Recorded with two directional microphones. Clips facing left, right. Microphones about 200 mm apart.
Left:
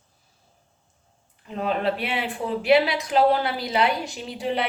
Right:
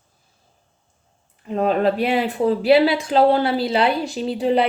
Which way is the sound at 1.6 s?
40° right (ahead or behind).